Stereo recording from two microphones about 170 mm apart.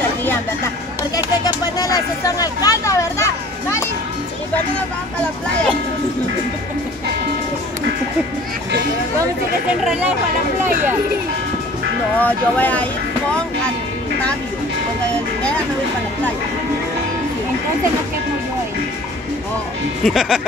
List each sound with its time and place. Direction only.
1.1 s a sound: 20° left (ahead or behind)
12.2 s speech: 10° left (ahead or behind)
20.0 s speech: centre (ahead or behind)